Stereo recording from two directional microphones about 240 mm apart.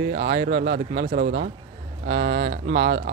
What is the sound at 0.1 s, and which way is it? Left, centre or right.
Speech, right.